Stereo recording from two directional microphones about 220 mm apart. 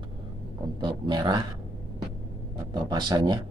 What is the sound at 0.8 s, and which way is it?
Speech, 20° right (ahead or behind).